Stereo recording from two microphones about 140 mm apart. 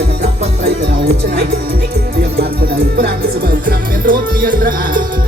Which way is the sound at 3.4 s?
90° right.